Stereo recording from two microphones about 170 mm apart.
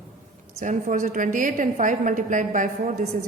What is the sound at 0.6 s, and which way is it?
A woman's voice, 45° right (ahead or behind).